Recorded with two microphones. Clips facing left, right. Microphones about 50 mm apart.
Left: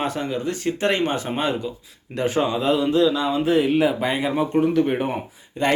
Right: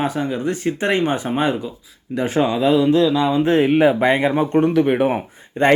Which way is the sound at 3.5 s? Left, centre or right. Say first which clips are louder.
Right 3 dB; right.